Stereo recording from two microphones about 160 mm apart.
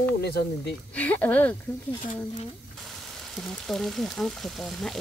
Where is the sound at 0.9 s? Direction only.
10° left (ahead or behind).